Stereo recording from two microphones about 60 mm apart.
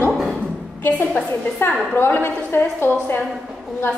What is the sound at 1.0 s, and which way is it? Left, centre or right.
A woman's voice, left.